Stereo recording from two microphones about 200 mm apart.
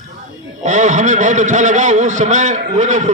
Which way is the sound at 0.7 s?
35° right (ahead or behind).